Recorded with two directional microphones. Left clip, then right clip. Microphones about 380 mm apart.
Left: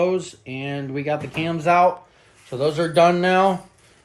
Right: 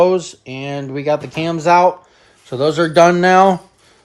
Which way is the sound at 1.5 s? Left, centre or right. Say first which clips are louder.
Right 5 dB; right.